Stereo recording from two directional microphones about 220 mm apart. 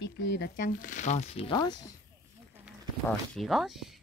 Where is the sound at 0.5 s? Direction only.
40° left (ahead or behind); by 1.9 s 20° left (ahead or behind).